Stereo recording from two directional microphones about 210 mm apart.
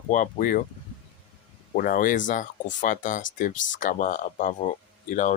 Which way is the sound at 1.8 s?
40° left (ahead or behind).